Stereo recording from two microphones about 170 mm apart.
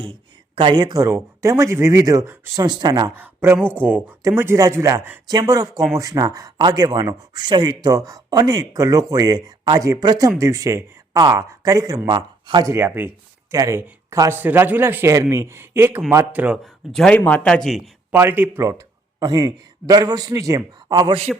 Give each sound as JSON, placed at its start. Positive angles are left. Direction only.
{"t": 0.0, "sound": "speech", "side_deg": -30}
{"t": 2.6, "sound": "speech", "side_deg": -25}
{"t": 3.2, "sound": "speech", "side_deg": -15}
{"t": 16.9, "sound": "speech", "side_deg": 5}
{"t": 18.1, "sound": "a man's voice", "side_deg": -10}